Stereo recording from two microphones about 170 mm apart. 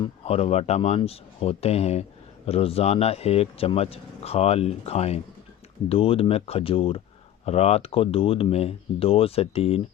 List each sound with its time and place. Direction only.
0.0 s speech: 35° left (ahead or behind)